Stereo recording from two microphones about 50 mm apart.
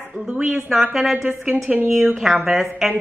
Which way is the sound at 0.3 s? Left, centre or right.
Centre.